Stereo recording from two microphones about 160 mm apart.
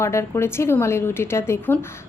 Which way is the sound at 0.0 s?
15° left (ahead or behind).